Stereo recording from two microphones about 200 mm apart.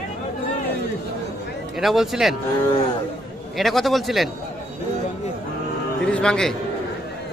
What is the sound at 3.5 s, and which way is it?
Speech, centre (ahead or behind).